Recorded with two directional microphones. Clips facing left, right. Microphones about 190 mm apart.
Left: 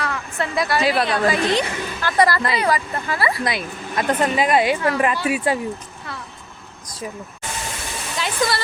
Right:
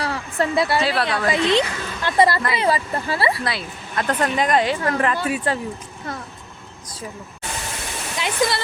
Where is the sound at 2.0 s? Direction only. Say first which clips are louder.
Right 1 dB; 25° right (ahead or behind).